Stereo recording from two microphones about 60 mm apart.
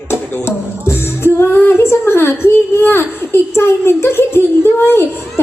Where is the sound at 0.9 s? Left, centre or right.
Left.